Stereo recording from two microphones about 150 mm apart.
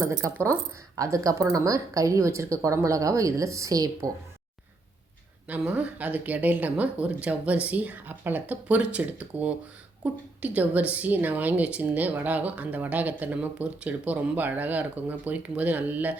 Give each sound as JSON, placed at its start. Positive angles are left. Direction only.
{"t": 0.0, "sound": "a woman's voice", "side_deg": -20}
{"t": 5.5, "sound": "a woman's voice", "side_deg": -10}